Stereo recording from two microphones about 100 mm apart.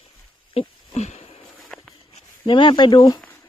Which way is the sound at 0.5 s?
85° left.